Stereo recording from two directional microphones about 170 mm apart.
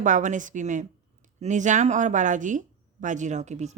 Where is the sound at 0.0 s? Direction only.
45° right (ahead or behind).